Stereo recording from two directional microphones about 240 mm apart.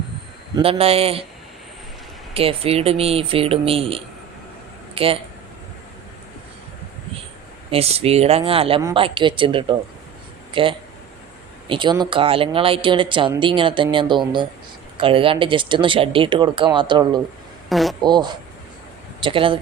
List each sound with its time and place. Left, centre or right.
0.5 s speech: right
2.3 s speech: right
7.7 s speech: right
17.7 s speech: centre
18.0 s speech: centre